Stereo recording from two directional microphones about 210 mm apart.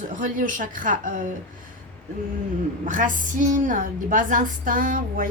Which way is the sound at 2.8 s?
40° right (ahead or behind).